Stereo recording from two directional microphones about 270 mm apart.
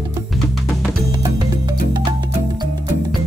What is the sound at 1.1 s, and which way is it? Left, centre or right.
Music, centre.